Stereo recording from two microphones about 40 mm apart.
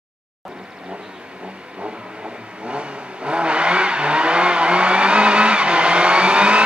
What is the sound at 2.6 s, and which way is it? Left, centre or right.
Vehicle, right.